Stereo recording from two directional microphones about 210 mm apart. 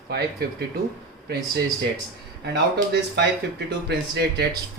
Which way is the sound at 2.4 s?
55° right (ahead or behind).